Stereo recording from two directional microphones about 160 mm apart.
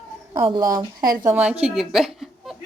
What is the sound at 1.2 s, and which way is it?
A woman's voice, 10° right (ahead or behind).